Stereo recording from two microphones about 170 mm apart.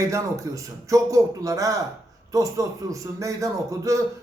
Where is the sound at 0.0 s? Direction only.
20° right (ahead or behind).